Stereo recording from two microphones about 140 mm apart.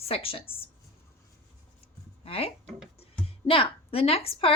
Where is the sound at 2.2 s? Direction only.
45° left (ahead or behind).